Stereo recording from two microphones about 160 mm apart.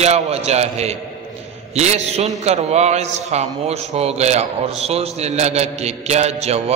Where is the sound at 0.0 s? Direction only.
40° right (ahead or behind).